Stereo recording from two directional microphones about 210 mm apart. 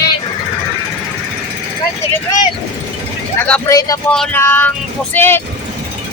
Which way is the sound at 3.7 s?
15° left (ahead or behind).